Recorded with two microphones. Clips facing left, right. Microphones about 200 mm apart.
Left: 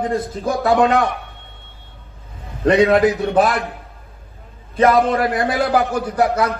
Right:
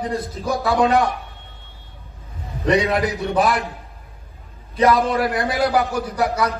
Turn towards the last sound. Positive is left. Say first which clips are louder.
# left 3 dB
turn(degrees=50)  # may be behind; listen again after turning